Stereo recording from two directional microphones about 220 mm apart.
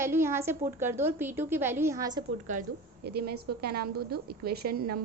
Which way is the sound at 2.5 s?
35° right (ahead or behind).